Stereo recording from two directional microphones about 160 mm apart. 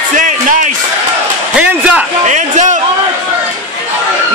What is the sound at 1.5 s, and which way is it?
Speech, 5° right (ahead or behind).